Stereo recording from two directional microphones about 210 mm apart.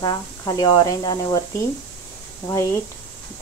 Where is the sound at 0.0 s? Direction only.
20° left (ahead or behind).